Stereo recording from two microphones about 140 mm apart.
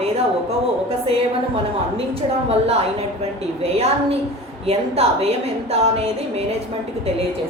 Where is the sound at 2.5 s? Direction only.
45° right (ahead or behind).